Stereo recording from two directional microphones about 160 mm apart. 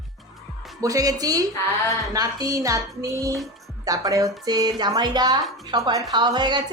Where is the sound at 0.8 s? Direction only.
20° right (ahead or behind).